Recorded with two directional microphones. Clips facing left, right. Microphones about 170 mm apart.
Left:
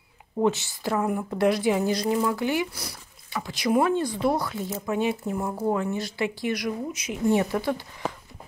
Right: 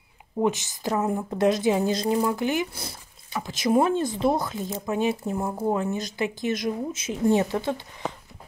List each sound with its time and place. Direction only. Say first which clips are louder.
0.4 s a woman's voice: left 1 dB; 15° right (ahead or behind)
5.5 s speech: even; 10° right (ahead or behind)
5.8 s a woman's voice: even; 20° right (ahead or behind)